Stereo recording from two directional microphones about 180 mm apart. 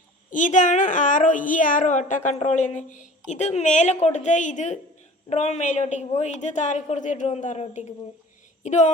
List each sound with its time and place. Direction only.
0.3 s a woman's voice: 45° left (ahead or behind)